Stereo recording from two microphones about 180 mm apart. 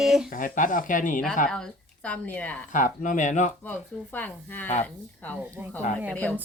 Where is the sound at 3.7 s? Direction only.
10° left (ahead or behind).